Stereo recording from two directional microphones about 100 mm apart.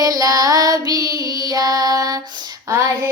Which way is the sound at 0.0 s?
40° right (ahead or behind).